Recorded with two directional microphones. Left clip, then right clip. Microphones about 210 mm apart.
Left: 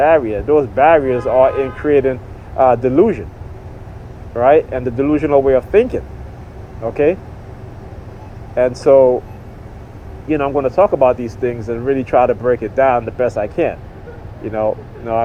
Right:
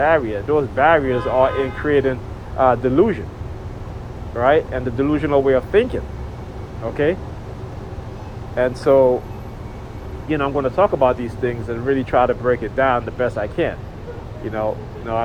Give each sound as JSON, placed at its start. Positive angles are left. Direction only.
{"t": 0.0, "sound": "speech", "side_deg": 40}
{"t": 4.4, "sound": "speech", "side_deg": 40}
{"t": 8.8, "sound": "speech", "side_deg": 40}
{"t": 10.2, "sound": "speech", "side_deg": 35}